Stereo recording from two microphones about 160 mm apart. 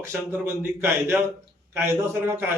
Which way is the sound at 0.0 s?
15° right (ahead or behind).